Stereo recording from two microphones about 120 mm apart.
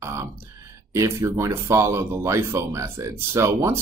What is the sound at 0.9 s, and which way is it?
Speech, 20° right (ahead or behind).